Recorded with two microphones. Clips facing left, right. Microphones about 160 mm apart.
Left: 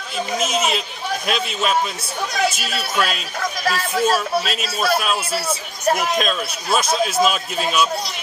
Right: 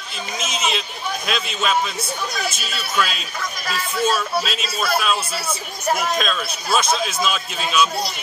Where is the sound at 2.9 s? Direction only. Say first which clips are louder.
Even; 45° left (ahead or behind).